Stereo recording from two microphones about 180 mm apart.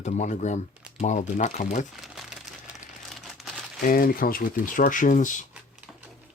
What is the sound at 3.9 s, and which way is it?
Speech, 50° left (ahead or behind).